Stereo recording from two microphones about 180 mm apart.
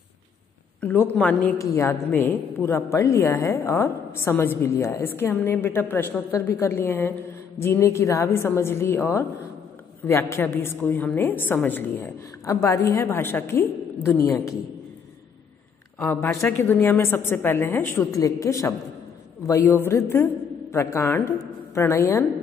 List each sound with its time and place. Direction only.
0.7 s a woman's voice: 10° left (ahead or behind)
16.0 s a woman's voice: 10° left (ahead or behind)